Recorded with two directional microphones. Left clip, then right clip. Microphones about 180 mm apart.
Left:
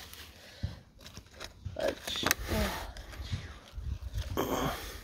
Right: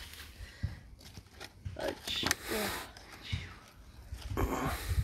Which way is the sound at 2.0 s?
50° left (ahead or behind).